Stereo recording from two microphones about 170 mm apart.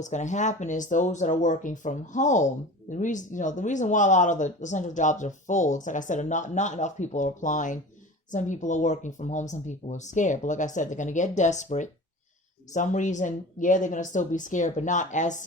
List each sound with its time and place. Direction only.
0.0 s speech: 45° left (ahead or behind)